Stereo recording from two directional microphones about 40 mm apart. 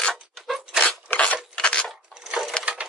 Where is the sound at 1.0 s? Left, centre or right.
Left.